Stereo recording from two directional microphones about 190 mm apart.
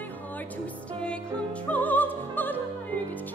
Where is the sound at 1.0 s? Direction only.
5° left (ahead or behind).